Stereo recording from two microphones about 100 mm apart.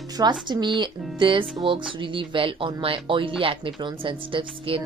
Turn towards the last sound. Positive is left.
turn(degrees=-60)  # may be behind; listen again after turning